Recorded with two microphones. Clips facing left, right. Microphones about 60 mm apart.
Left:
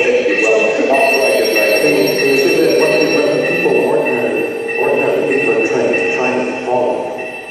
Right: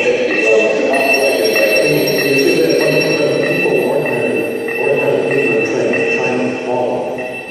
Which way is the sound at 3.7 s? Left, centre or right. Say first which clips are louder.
Left 3 dB; left.